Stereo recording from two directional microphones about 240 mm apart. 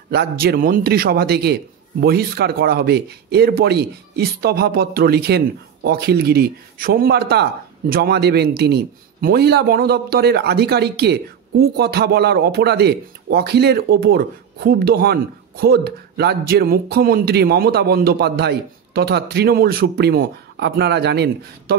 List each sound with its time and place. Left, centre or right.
0.1 s a man's voice: right